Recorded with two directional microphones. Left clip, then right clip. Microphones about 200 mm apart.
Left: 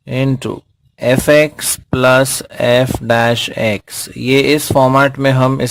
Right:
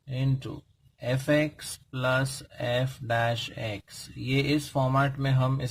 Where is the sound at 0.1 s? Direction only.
45° left (ahead or behind).